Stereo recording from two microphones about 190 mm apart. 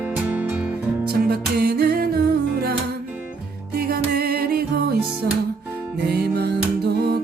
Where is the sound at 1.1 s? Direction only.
55° right (ahead or behind).